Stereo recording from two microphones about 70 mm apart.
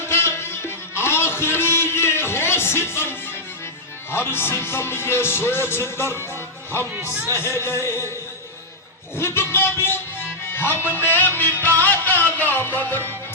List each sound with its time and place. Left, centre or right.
0.1 s music: left
7.3 s music: left
9.1 s music: left
10.8 s music: right
11.0 s music: left